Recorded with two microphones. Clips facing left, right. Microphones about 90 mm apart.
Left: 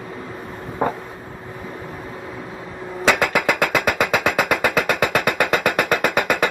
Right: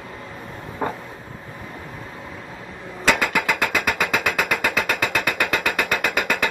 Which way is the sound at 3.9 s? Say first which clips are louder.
Left 3 dB; 20° left (ahead or behind).